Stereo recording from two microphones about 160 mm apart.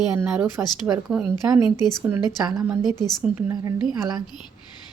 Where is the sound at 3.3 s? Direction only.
20° right (ahead or behind).